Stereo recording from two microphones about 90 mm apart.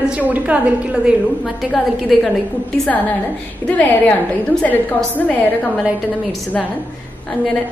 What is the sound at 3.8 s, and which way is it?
Speech, 15° left (ahead or behind).